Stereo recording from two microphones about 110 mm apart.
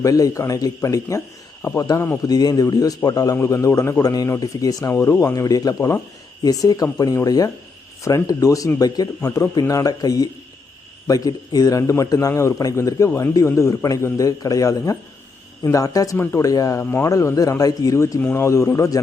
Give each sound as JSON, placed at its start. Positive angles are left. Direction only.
{"t": 0.0, "sound": "a man's voice", "side_deg": 30}
{"t": 16.1, "sound": "a man's voice", "side_deg": 20}
{"t": 16.4, "sound": "a man's voice", "side_deg": 30}
{"t": 16.8, "sound": "speech", "side_deg": 15}
{"t": 17.1, "sound": "a man's voice", "side_deg": 30}